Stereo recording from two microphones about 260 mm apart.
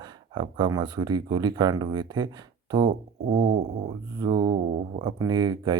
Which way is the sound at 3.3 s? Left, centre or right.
Right.